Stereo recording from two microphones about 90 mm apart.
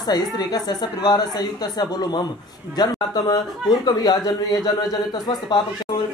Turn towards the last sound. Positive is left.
turn(degrees=55)  # may be behind; listen again after turning